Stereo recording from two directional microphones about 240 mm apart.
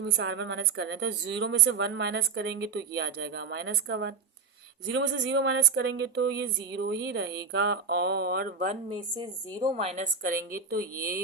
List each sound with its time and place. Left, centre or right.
0.0 s a woman's voice: right
8.7 s a woman's voice: centre; by 10.8 s right